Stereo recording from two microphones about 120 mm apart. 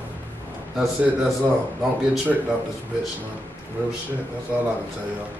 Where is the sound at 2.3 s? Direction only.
5° right (ahead or behind).